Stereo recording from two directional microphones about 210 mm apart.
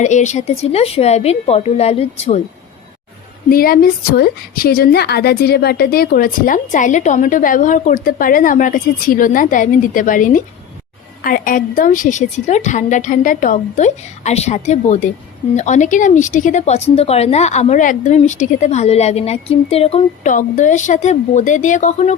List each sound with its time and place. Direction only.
0.0 s a woman's voice: 35° left (ahead or behind)
3.5 s a woman's voice: 45° left (ahead or behind)